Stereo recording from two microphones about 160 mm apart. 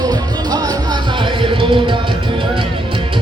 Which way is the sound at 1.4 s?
35° right (ahead or behind).